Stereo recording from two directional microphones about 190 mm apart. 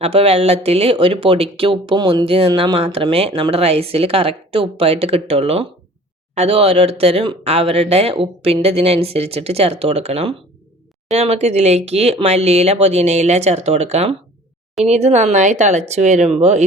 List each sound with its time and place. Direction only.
0.0 s speech: 30° right (ahead or behind)